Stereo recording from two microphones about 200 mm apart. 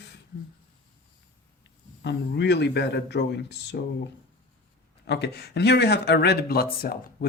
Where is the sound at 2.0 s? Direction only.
60° left (ahead or behind).